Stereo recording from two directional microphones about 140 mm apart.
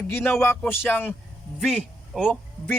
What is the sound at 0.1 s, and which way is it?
Speech, 15° left (ahead or behind).